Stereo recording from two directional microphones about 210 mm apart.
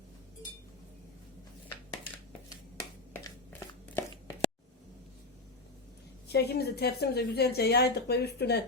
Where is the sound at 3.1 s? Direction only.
10° left (ahead or behind).